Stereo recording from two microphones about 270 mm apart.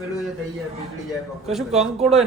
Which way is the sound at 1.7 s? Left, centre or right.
Right.